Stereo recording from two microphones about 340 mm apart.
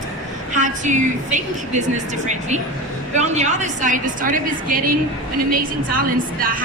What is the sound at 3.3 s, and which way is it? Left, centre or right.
A woman's voice, right.